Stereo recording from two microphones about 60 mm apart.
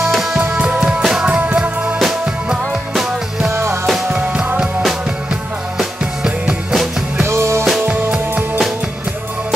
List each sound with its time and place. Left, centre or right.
0.1 s music: centre
0.4 s music: right; by 3.5 s centre
4.1 s music: right
5.8 s music: centre
7.2 s music: right
7.9 s music: right